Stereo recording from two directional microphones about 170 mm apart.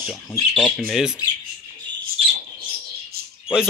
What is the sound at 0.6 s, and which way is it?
Speech, 5° left (ahead or behind).